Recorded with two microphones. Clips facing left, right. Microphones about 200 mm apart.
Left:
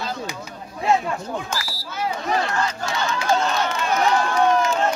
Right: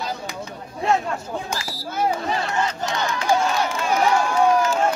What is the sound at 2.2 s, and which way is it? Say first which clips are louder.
Crowd: left 1 dB; 20° right (ahead or behind).